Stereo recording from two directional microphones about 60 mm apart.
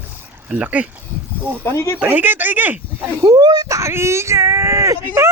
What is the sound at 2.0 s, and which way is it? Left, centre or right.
Speech, right.